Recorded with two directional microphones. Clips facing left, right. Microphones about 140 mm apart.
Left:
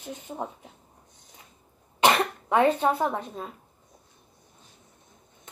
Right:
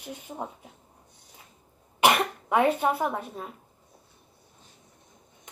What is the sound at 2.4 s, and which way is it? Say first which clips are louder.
Speech: left 1 dB; 10° right (ahead or behind).